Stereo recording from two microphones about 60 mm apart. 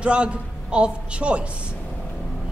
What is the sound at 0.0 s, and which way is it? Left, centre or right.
A woman's voice, centre.